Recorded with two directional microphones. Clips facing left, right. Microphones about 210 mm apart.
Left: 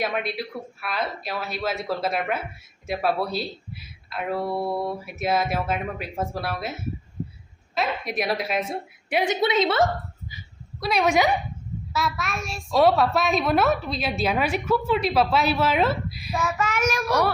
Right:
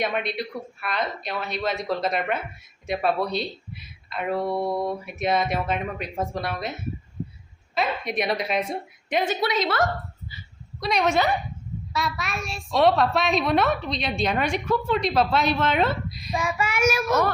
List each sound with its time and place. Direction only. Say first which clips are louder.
0.0 s a child's voice: right 1 dB; 5° left (ahead or behind)
7.8 s a child's voice: right 1 dB; centre (ahead or behind); by 9.8 s 25° left (ahead or behind)
10.8 s a woman's voice: left 1 dB; 5° left (ahead or behind)
16.4 s a child's voice: right 1 dB; 10° right (ahead or behind)